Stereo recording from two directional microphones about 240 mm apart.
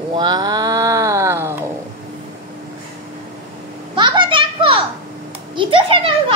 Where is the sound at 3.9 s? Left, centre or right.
Centre.